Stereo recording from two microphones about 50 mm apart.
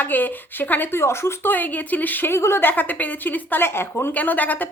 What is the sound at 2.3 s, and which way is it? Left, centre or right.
Speech, left.